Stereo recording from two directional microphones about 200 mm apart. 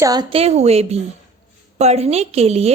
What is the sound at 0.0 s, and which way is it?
A woman's voice, 20° right (ahead or behind).